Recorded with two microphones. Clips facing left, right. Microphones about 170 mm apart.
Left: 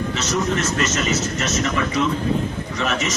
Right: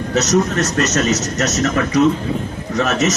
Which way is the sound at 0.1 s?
40° right (ahead or behind).